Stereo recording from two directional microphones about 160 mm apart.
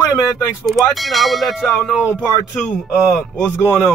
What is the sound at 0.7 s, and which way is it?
Speech, centre (ahead or behind).